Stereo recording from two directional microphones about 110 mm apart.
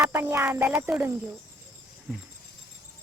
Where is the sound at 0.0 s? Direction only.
20° right (ahead or behind).